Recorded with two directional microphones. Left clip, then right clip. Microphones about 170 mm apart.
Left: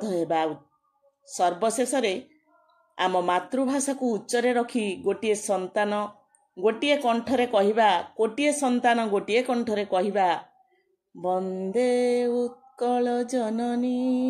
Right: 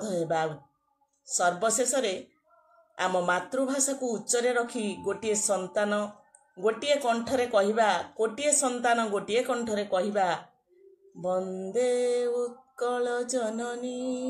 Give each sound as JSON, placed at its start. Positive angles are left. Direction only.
{"t": 0.0, "sound": "a sound", "side_deg": 30}
{"t": 1.2, "sound": "mantra", "side_deg": 30}
{"t": 6.5, "sound": "speech", "side_deg": 30}
{"t": 11.1, "sound": "mantra", "side_deg": 30}